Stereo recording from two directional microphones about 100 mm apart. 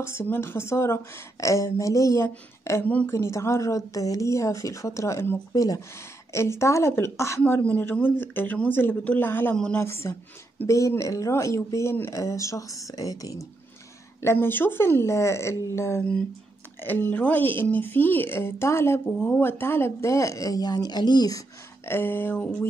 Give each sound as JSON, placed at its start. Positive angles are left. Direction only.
{"t": 0.0, "sound": "a woman's voice", "side_deg": 25}
{"t": 5.5, "sound": "a woman's voice", "side_deg": 35}
{"t": 14.2, "sound": "a woman's voice", "side_deg": 25}
{"t": 16.0, "sound": "a woman's voice", "side_deg": 10}
{"t": 21.8, "sound": "a woman's voice", "side_deg": 20}